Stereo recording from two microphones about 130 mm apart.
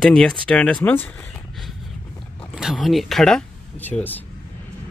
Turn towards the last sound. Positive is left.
turn(degrees=15)  # may be behind; listen again after turning